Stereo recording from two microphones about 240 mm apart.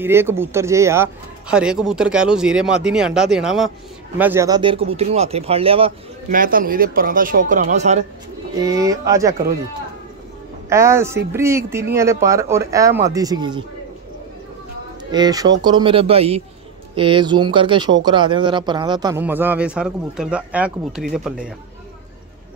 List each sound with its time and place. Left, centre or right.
0.0 s a man's voice: centre
6.3 s speech: right
8.5 s speech: centre
10.7 s speech: centre
15.0 s a man's voice: centre